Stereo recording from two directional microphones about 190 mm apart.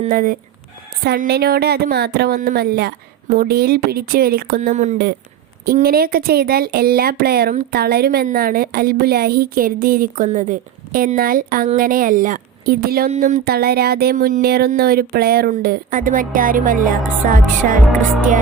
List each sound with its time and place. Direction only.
0.1 s speech: 45° right (ahead or behind)
1.0 s speech: 55° right (ahead or behind); by 5.0 s 40° right (ahead or behind)
5.6 s speech: 50° right (ahead or behind)
13.1 s a sound: 40° right (ahead or behind)
14.7 s speech: 50° right (ahead or behind)